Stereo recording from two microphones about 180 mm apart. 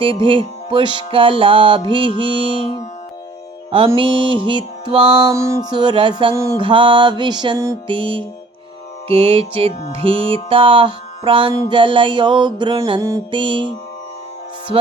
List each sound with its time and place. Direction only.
0.0 s music: 30° right (ahead or behind)
3.9 s music: 30° right (ahead or behind)
5.3 s music: 15° right (ahead or behind)